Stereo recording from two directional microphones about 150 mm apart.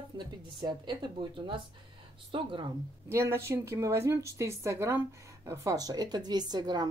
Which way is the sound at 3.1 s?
20° right (ahead or behind).